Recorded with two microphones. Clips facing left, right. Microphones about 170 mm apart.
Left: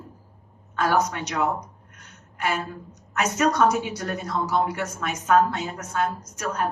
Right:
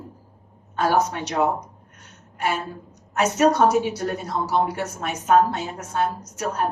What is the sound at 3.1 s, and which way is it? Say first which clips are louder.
A woman's voice: right 3 dB; 30° right (ahead or behind).